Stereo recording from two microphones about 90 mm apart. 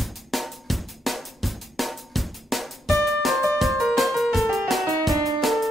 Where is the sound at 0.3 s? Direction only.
Centre (ahead or behind).